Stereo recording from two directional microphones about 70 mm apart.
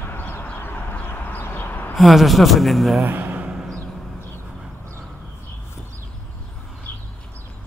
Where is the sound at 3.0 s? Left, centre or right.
Right.